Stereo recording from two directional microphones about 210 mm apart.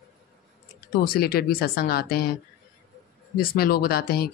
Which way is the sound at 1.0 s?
45° left (ahead or behind).